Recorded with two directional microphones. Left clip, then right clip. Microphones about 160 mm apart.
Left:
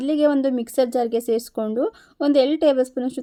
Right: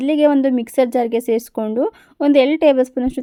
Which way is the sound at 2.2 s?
50° right (ahead or behind).